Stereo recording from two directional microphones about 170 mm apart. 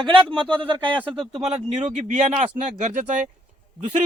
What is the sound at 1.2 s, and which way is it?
Speech, centre (ahead or behind).